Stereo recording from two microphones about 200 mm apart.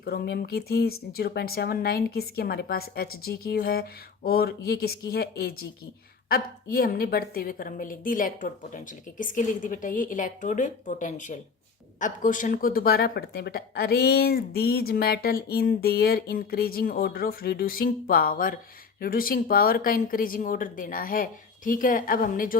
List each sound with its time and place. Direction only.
0.0 s a woman's voice: 50° left (ahead or behind)